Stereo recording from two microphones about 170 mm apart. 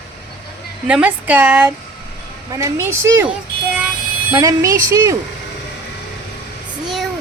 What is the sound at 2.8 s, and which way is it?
Speech, 15° right (ahead or behind).